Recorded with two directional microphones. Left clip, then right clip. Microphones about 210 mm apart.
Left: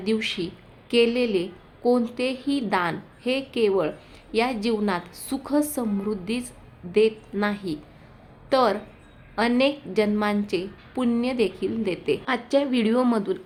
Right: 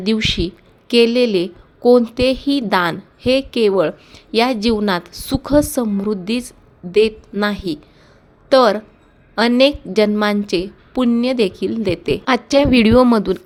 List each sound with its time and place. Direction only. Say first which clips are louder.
0.0 s a woman's voice: right 8 dB; 40° right (ahead or behind)